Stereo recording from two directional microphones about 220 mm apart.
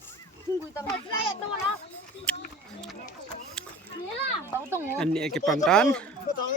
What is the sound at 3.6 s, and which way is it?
Children playing, 5° left (ahead or behind).